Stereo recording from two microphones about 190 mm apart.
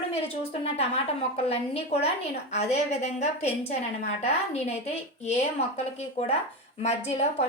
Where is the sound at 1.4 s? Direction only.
30° left (ahead or behind).